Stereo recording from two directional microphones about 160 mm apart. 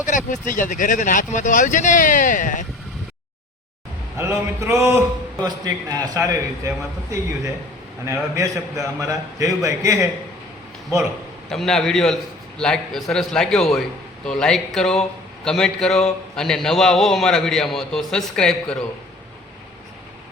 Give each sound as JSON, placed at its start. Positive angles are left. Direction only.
{"t": 0.3, "sound": "speech", "side_deg": 55}
{"t": 4.2, "sound": "a man's voice", "side_deg": -15}
{"t": 11.5, "sound": "a man's voice", "side_deg": 5}